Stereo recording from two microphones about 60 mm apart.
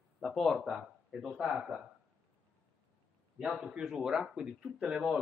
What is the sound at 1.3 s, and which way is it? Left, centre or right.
Speech, centre.